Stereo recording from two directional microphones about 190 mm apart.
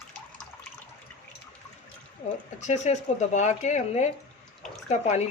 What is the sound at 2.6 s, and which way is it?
Speech, 35° left (ahead or behind).